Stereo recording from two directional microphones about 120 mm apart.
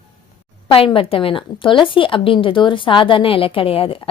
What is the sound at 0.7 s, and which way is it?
A woman's voice, 50° left (ahead or behind).